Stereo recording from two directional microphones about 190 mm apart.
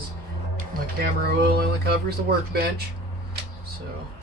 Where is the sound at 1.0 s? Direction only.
55° right (ahead or behind).